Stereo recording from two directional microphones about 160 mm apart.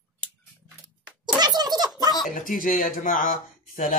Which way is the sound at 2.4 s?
55° left (ahead or behind).